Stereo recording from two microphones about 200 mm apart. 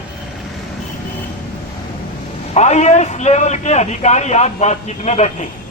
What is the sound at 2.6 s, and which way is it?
A man's voice, 35° left (ahead or behind).